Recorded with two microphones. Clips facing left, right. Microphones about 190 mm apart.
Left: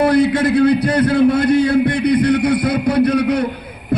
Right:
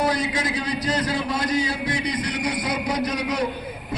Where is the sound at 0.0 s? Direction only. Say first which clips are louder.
Left 10 dB; 60° left (ahead or behind).